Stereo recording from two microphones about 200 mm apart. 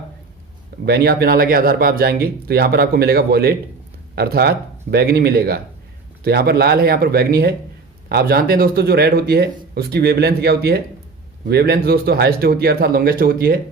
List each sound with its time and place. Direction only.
0.9 s speech: 55° right (ahead or behind)